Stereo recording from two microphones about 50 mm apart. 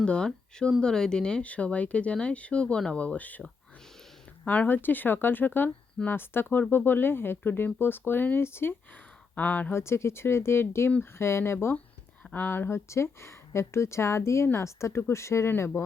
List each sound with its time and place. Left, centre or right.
0.0 s speech: centre
3.2 s speech: left
4.4 s speech: left
4.7 s speech: left
8.4 s speech: left
9.3 s speech: left
9.7 s speech: left
12.3 s speech: left
12.7 s speech: left